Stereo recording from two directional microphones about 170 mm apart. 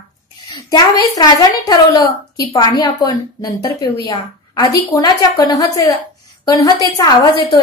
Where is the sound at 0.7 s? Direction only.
25° left (ahead or behind).